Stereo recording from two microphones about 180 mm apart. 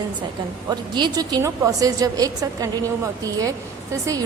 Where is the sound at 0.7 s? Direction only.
25° right (ahead or behind).